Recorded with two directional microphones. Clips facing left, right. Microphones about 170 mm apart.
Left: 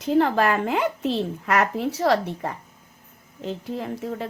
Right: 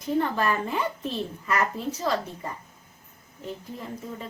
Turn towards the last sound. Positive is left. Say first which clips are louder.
# left 7 dB
turn(degrees=80)